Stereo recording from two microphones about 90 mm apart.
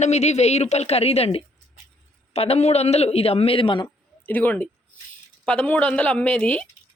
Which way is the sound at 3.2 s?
90° left.